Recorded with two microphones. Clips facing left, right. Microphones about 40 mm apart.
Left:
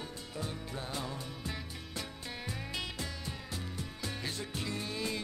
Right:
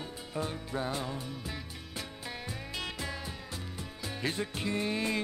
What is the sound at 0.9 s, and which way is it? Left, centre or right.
Music, centre.